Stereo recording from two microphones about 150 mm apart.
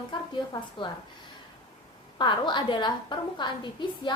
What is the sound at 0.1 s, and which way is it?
Speech, 30° left (ahead or behind).